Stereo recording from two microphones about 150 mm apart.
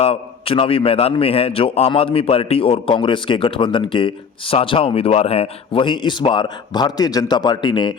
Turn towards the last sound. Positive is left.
turn(degrees=30)  # may be behind; listen again after turning